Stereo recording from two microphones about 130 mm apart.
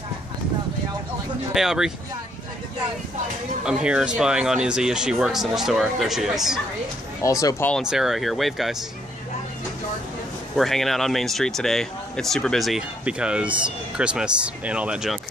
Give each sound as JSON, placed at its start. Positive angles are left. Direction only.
{"t": 1.5, "sound": "speech", "side_deg": -5}
{"t": 3.6, "sound": "speech", "side_deg": -5}
{"t": 7.2, "sound": "speech", "side_deg": 25}
{"t": 7.8, "sound": "speech", "side_deg": -5}
{"t": 10.5, "sound": "speech", "side_deg": 0}